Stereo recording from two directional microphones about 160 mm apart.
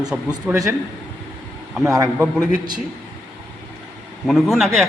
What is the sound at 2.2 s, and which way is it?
Speech, 5° right (ahead or behind).